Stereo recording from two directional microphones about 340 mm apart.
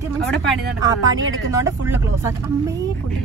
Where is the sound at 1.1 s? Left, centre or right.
Right.